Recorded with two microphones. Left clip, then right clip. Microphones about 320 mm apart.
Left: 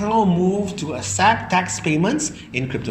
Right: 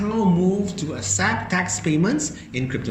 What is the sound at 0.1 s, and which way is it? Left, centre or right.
A woman's voice, centre.